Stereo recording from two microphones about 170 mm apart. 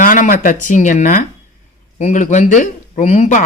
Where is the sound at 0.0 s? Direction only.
50° left (ahead or behind).